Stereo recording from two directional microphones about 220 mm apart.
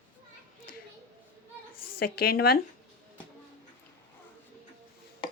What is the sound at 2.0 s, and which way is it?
Speech, 45° left (ahead or behind).